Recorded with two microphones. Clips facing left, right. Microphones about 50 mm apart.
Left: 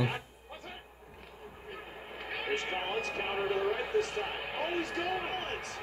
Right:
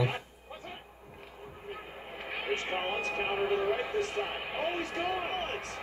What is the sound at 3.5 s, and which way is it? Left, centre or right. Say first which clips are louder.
Speech: right 1 dB; right.